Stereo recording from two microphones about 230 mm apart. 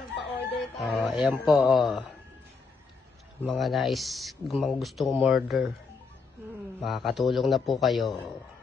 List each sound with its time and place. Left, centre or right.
0.1 s chicken: left
0.7 s speech: centre
3.4 s speech: centre
6.8 s speech: centre